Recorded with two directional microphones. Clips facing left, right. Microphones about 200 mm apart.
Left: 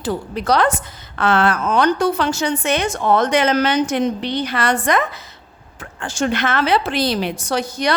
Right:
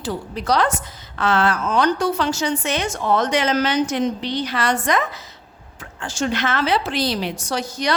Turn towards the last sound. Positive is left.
turn(degrees=55)  # may be behind; listen again after turning